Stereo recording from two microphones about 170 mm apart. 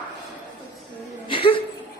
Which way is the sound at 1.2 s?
30° left (ahead or behind).